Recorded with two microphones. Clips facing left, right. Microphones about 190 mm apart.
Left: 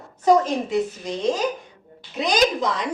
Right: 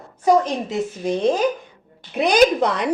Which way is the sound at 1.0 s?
55° right (ahead or behind).